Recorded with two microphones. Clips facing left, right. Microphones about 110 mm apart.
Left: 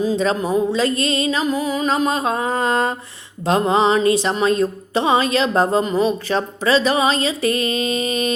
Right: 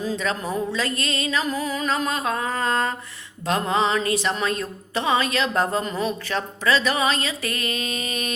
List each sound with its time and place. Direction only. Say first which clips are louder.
0.7 s music: left 7 dB; 25° left (ahead or behind)